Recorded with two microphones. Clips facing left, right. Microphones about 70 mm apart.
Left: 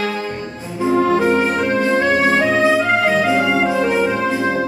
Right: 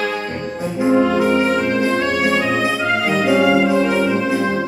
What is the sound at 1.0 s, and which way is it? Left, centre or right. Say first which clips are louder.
Music: even; left.